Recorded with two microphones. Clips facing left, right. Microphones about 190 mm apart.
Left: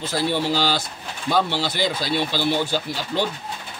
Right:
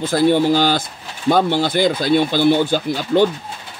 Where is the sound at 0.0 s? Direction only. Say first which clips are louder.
Right 8 dB; 50° right (ahead or behind).